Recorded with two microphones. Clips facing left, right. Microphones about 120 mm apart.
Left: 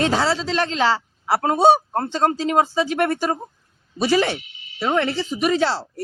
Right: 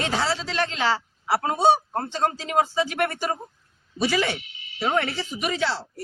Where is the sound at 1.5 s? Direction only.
80° left.